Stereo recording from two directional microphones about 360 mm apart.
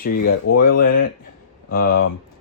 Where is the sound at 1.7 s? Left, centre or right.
Left.